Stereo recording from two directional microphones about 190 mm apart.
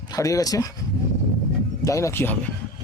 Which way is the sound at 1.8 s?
15° left (ahead or behind).